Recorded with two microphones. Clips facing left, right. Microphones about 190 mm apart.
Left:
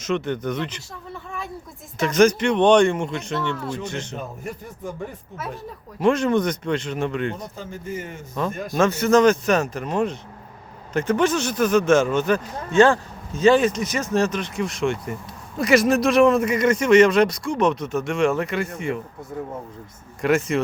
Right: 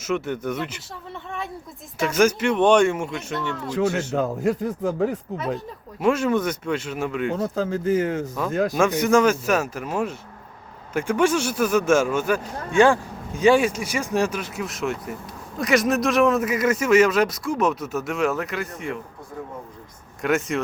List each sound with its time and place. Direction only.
0.0 s speech: 5° right (ahead or behind)
4.1 s a man's voice: 85° right
6.0 s speech: 5° right (ahead or behind)
7.5 s a man's voice: 90° right
8.7 s a man's voice: 15° right (ahead or behind)
20.2 s a man's voice: centre (ahead or behind)